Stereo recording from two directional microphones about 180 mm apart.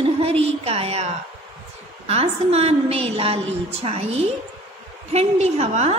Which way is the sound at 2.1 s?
35° right (ahead or behind).